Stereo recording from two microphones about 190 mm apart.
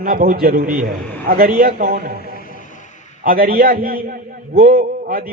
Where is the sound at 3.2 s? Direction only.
50° right (ahead or behind).